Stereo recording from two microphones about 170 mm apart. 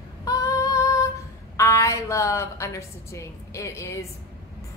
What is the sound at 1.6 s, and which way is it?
A woman's voice, 20° left (ahead or behind).